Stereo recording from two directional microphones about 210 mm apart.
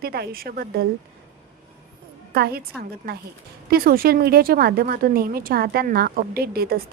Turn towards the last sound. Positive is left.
turn(degrees=-45)  # may be behind; listen again after turning